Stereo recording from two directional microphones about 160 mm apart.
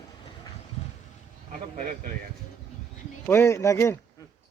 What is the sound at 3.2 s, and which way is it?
Speech, 15° left (ahead or behind).